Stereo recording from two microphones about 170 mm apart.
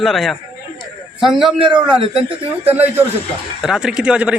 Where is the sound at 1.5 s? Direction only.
30° right (ahead or behind).